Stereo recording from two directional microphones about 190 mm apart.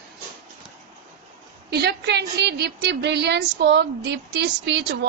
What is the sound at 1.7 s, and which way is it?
A woman's voice, 60° right (ahead or behind).